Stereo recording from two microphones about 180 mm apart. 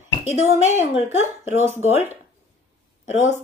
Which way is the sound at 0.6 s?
40° left (ahead or behind).